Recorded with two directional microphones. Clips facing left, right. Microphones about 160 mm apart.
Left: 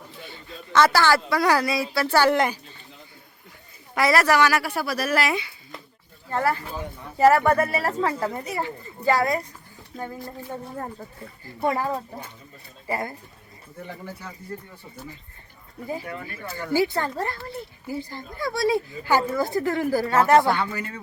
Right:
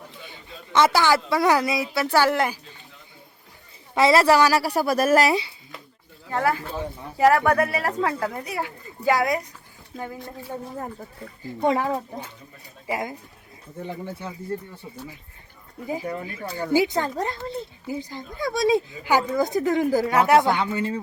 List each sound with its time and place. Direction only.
0.3 s a woman's voice: 15° right (ahead or behind)
2.1 s speech: 10° right (ahead or behind)
3.9 s a woman's voice: 25° right (ahead or behind)
6.3 s speech: centre (ahead or behind)
11.6 s speech: 20° right (ahead or behind)
12.9 s speech: 10° right (ahead or behind)
13.8 s speech: 20° right (ahead or behind)
16.2 s speech: 15° right (ahead or behind)